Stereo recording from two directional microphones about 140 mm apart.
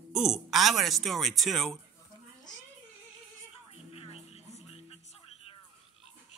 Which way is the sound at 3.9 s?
45° left (ahead or behind).